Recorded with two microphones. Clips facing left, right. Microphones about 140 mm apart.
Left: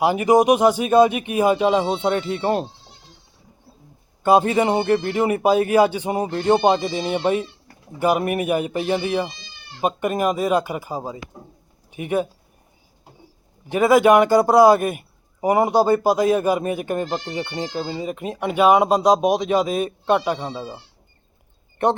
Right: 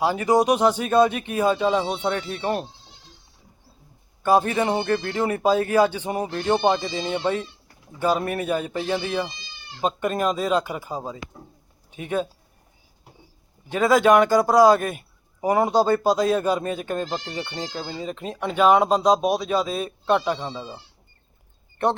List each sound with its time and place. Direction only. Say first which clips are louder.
0.0 s a man's voice: left 4 dB; 15° left (ahead or behind)
4.2 s a man's voice: left 3 dB; 20° left (ahead or behind)
13.7 s a man's voice: left 3 dB; 10° left (ahead or behind)